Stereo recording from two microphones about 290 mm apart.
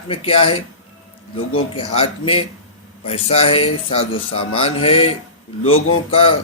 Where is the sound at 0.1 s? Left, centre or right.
Centre.